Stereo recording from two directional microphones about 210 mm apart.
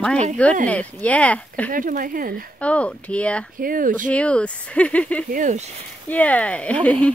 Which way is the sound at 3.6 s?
40° right (ahead or behind).